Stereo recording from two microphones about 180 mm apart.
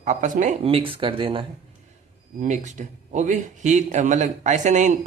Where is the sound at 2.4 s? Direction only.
40° right (ahead or behind).